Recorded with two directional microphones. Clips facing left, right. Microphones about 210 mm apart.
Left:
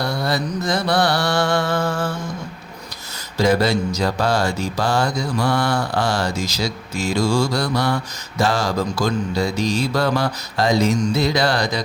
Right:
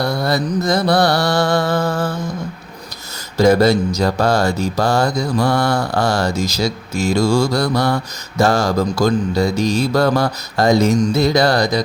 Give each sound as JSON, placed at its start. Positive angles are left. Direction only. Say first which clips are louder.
{"t": 0.0, "sound": "mantra", "louder": "right 4 dB", "side_deg": -40}
{"t": 3.3, "sound": "mantra", "louder": "right 5 dB", "side_deg": -45}